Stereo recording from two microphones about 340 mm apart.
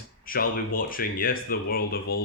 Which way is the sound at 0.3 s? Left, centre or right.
Left.